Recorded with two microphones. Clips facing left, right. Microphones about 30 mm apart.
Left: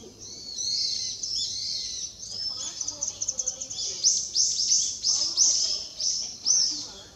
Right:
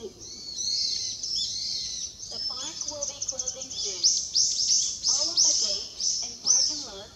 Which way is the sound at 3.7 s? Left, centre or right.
Centre.